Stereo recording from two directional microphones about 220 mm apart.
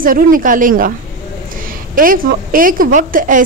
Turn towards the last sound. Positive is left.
turn(degrees=-35)  # may be behind; listen again after turning